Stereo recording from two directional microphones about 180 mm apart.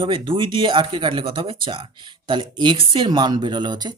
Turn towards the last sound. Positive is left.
turn(degrees=-25)  # may be behind; listen again after turning